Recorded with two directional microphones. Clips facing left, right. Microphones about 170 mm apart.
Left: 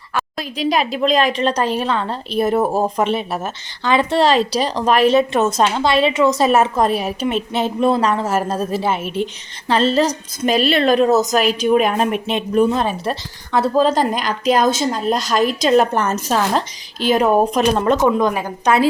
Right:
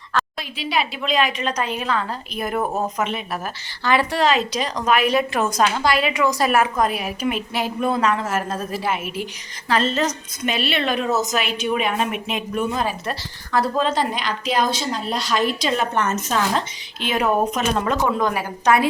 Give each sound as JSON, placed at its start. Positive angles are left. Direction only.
{"t": 0.3, "sound": "a woman's voice", "side_deg": 40}
{"t": 13.8, "sound": "a woman's voice", "side_deg": 45}
{"t": 17.9, "sound": "a woman's voice", "side_deg": 20}